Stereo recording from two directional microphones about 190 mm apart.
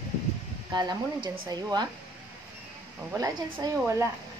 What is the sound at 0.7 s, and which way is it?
A woman's voice, 20° right (ahead or behind).